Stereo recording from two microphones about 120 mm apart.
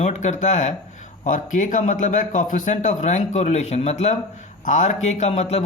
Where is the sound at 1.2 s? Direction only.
90° left; by 4.1 s 70° left (ahead or behind).